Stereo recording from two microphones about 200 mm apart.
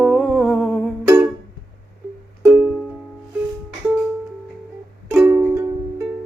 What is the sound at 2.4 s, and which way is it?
Music, 5° right (ahead or behind).